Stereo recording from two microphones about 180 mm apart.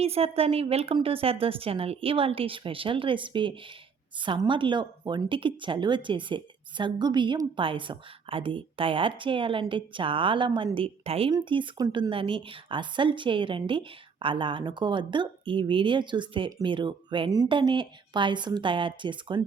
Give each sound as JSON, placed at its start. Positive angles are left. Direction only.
{"t": 0.0, "sound": "a woman's voice", "side_deg": -35}